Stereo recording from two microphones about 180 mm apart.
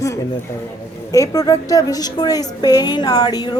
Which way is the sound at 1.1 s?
20° left (ahead or behind).